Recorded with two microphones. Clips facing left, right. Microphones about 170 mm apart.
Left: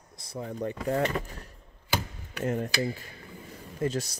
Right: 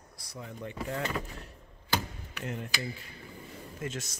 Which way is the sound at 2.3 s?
40° left (ahead or behind).